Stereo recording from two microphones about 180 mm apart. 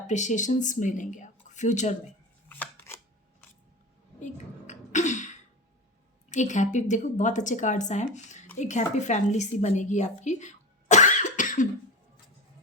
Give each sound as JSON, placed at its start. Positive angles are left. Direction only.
{"t": 0.1, "sound": "speech", "side_deg": 40}
{"t": 2.5, "sound": "scissors", "side_deg": 10}
{"t": 4.2, "sound": "a sound", "side_deg": 40}
{"t": 6.3, "sound": "a woman's voice", "side_deg": 40}